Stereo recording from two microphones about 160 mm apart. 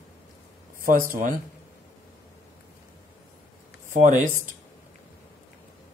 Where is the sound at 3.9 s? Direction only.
50° right (ahead or behind).